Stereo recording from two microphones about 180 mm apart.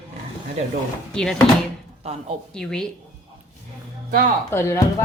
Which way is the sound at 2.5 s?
5° left (ahead or behind).